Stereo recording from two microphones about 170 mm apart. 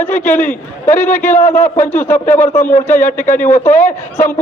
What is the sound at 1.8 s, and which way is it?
Speech, 10° left (ahead or behind).